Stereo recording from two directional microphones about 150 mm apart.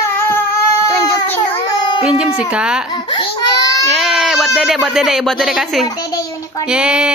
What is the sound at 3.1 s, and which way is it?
Baby cry, 30° left (ahead or behind).